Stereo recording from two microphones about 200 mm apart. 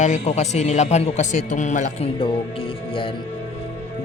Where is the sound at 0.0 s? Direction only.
35° left (ahead or behind).